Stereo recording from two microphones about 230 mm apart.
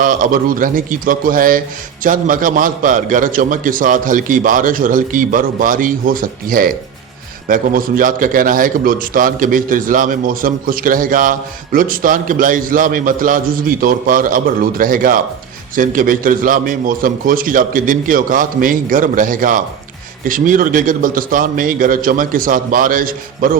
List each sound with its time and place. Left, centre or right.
0.0 s a man's voice: right